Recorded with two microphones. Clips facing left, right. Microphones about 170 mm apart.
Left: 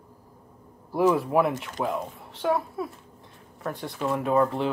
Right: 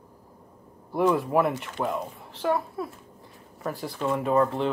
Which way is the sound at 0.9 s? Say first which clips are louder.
Left 1 dB; centre (ahead or behind).